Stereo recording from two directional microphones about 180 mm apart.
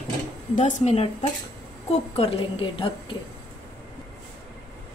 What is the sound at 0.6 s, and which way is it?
A woman's voice, 45° left (ahead or behind).